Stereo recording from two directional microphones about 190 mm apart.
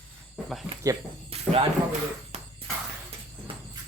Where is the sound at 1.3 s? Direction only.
30° right (ahead or behind).